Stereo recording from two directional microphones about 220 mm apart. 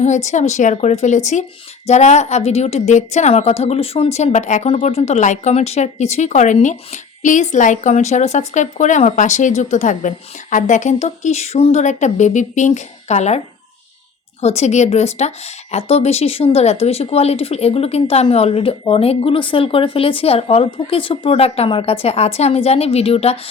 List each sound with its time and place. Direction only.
0.0 s a woman's voice: 30° left (ahead or behind)
14.4 s speech: 30° left (ahead or behind)